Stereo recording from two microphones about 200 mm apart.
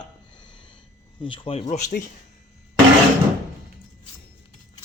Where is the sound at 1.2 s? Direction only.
25° left (ahead or behind).